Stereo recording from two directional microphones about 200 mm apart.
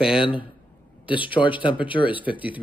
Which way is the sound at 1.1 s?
25° left (ahead or behind).